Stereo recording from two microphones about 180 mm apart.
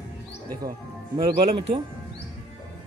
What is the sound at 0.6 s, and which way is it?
Speech, 20° right (ahead or behind).